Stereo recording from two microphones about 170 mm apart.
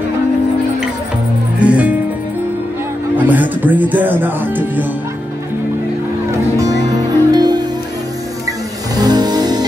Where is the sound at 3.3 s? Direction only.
10° right (ahead or behind).